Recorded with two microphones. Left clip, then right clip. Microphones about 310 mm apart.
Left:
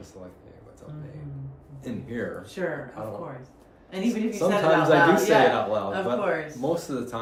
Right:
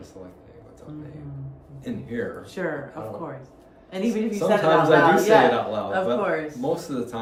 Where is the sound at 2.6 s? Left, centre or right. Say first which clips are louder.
Right 1 dB; centre.